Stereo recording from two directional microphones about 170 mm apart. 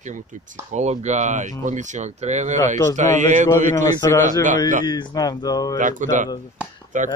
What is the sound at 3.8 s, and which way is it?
Speech, 20° left (ahead or behind).